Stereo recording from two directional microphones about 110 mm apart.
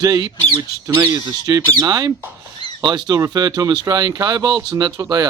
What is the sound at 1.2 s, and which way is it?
Speech, 35° right (ahead or behind).